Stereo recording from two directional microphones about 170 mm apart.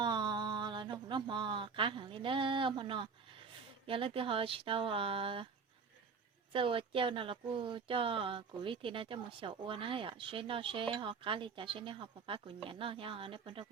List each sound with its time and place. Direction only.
0.0 s a sound: 25° right (ahead or behind)
3.8 s speech: 30° right (ahead or behind)
6.5 s speech: 30° right (ahead or behind)